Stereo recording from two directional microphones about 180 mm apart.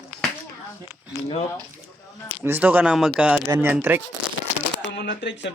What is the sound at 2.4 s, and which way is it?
Speech, 10° right (ahead or behind).